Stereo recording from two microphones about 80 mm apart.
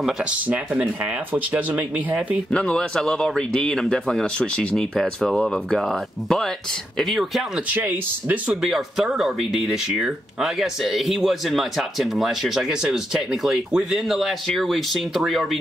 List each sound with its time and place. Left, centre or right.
0.2 s speech: centre
2.5 s speech: centre
4.9 s speech: centre
7.7 s speech: right
8.5 s speech: centre